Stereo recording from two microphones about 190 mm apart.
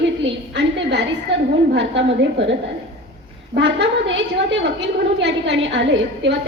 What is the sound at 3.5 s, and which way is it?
A woman's voice, 70° right (ahead or behind).